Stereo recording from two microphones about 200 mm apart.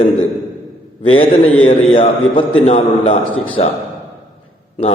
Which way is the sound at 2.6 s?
30° left (ahead or behind).